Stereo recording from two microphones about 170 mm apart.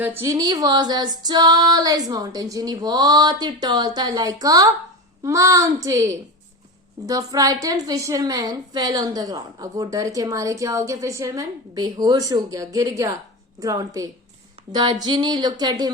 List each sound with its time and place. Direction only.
0.0 s a woman's voice: 15° right (ahead or behind)